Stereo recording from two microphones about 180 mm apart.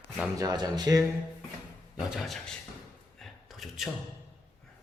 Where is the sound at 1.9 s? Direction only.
Centre (ahead or behind).